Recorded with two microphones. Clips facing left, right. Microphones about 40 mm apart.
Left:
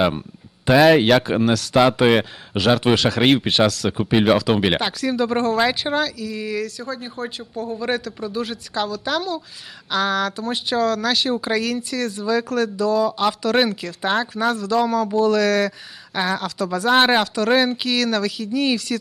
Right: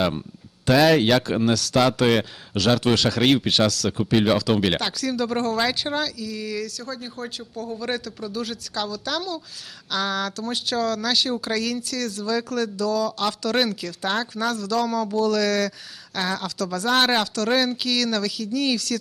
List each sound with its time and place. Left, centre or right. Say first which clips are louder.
0.0 s speech: left 4 dB; centre
10.8 s speech: left 3 dB; centre